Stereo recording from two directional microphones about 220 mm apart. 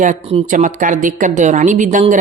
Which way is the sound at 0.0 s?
30° right (ahead or behind).